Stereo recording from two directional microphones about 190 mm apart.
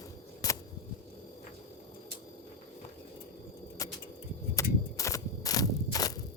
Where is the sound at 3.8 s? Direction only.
15° left (ahead or behind).